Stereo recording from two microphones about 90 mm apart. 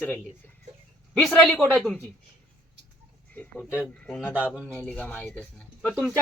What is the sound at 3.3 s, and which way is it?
Speech, 15° left (ahead or behind).